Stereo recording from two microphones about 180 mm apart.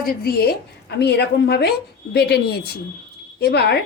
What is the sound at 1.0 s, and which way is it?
A woman's voice, 70° left (ahead or behind).